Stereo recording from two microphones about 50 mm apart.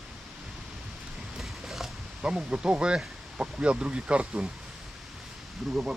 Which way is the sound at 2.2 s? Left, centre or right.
Centre.